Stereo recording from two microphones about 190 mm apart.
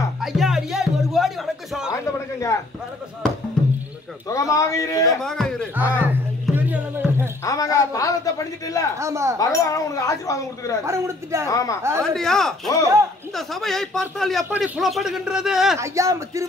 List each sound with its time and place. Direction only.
0.2 s music: centre (ahead or behind)
2.1 s a sound: 15° left (ahead or behind)
4.3 s speech: 15° left (ahead or behind)
5.2 s speech: 5° left (ahead or behind)
5.8 s music: 10° right (ahead or behind)
7.4 s speech: 15° left (ahead or behind)
8.9 s speech: 15° right (ahead or behind)
9.4 s speech: 20° left (ahead or behind)
10.9 s speech: 15° right (ahead or behind)
11.4 s speech: 15° left (ahead or behind)
12.0 s speech: 5° left (ahead or behind)
15.8 s speech: 15° right (ahead or behind)